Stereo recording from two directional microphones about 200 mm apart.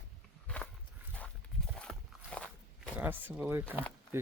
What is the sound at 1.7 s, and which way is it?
Walk, 5° left (ahead or behind).